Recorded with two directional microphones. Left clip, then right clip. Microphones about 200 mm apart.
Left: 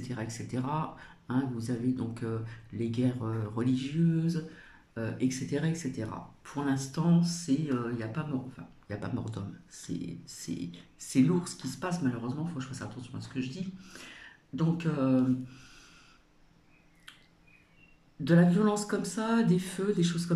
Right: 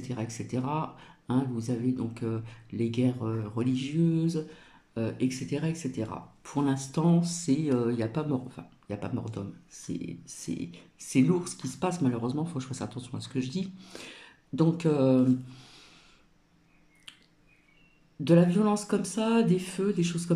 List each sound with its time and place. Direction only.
0.0 s speech: 10° right (ahead or behind)
8.8 s speech: 10° right (ahead or behind)
18.2 s speech: 15° right (ahead or behind)